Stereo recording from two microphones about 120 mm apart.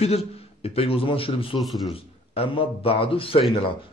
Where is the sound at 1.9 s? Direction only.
50° left (ahead or behind).